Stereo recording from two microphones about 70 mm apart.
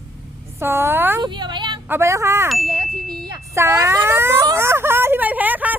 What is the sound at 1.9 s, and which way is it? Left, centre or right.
Speech, right.